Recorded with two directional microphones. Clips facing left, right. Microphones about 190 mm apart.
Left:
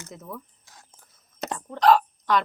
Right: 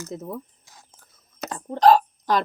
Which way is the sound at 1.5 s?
35° right (ahead or behind).